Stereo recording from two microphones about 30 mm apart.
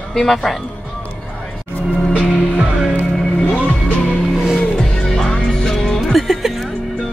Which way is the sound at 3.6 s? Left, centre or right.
Left.